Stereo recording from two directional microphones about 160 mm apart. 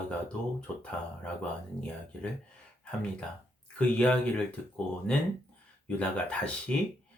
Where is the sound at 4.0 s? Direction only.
10° left (ahead or behind).